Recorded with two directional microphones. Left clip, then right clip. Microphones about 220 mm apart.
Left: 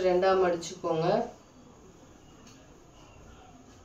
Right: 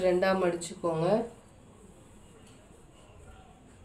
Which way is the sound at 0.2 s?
45° right (ahead or behind).